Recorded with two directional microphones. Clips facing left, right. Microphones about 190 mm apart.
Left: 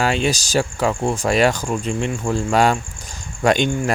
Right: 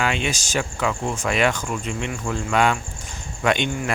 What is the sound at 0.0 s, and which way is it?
Speech, 35° left (ahead or behind).